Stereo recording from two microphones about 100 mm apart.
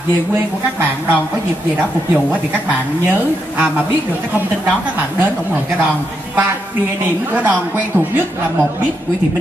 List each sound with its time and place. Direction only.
7.3 s a woman's voice: 20° right (ahead or behind)